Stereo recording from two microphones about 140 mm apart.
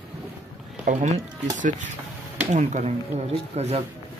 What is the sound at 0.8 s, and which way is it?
Speech, 55° right (ahead or behind).